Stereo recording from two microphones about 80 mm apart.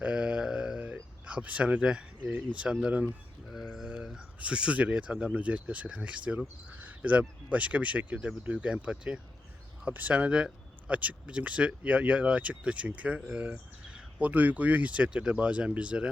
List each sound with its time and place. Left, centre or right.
0.0 s a sound: centre
1.3 s speech: centre
3.5 s speech: centre